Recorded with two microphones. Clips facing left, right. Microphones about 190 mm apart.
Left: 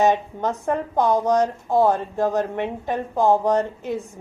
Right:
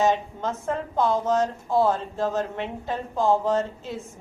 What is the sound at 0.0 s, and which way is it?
A woman's voice, 15° left (ahead or behind).